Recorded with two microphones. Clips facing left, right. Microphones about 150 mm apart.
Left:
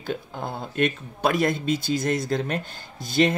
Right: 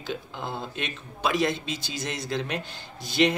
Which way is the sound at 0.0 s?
45° left (ahead or behind).